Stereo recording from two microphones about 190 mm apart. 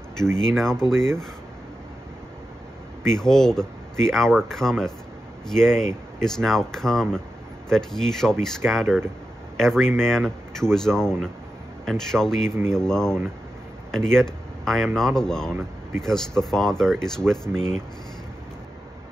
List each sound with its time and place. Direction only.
0.4 s speech: 5° left (ahead or behind)
3.1 s speech: 5° left (ahead or behind)
12.4 s speech: 15° right (ahead or behind)
12.7 s speech: 5° left (ahead or behind)
17.6 s speech: 35° left (ahead or behind)